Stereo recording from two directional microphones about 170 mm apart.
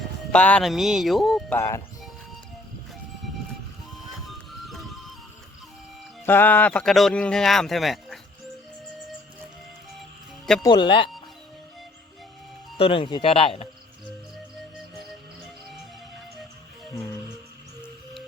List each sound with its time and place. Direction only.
0.3 s speech: 5° left (ahead or behind)
1.5 s speech: 15° left (ahead or behind)
3.9 s music: centre (ahead or behind)
6.2 s speech: 10° left (ahead or behind)
10.6 s speech: 25° left (ahead or behind)
12.8 s speech: 30° left (ahead or behind)
16.8 s music: centre (ahead or behind)